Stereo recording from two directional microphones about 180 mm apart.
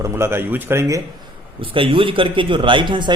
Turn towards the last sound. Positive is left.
turn(degrees=-25)  # may be behind; listen again after turning